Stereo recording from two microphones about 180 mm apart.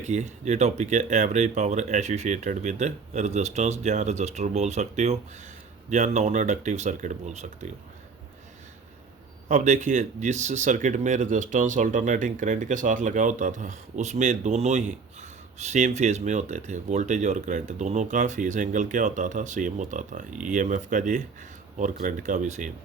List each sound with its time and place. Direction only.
0.0 s speech: 40° right (ahead or behind)
9.5 s speech: 40° right (ahead or behind)